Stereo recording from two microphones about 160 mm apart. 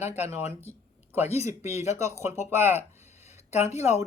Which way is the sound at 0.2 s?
15° right (ahead or behind).